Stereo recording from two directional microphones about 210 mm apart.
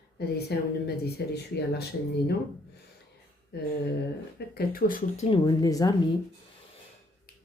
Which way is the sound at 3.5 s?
50° left (ahead or behind).